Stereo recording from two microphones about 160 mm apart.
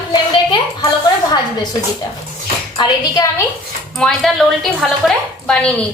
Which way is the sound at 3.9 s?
5° left (ahead or behind).